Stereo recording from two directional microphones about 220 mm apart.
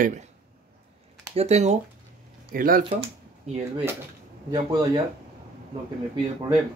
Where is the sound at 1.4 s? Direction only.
30° right (ahead or behind).